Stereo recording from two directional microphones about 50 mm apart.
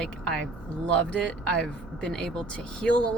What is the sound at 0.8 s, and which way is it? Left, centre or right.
Speech, left.